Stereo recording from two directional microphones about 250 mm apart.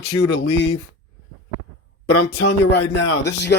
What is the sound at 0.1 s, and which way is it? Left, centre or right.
Speech, left.